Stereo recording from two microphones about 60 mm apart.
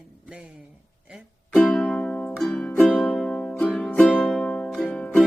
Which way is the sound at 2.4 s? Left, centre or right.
Centre.